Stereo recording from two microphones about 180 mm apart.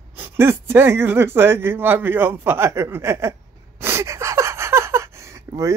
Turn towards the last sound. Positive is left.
turn(degrees=-15)  # may be behind; listen again after turning